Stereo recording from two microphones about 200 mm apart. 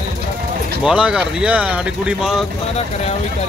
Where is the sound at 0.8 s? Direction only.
5° right (ahead or behind).